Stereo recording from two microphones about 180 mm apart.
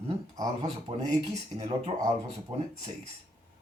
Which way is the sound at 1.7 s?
20° right (ahead or behind).